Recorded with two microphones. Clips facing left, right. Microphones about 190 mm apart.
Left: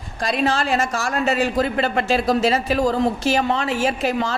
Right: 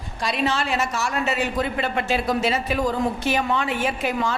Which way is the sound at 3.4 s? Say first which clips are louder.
Left 3 dB; 35° left (ahead or behind).